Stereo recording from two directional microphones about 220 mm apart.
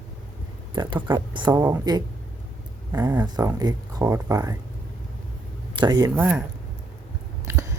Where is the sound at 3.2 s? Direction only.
15° right (ahead or behind).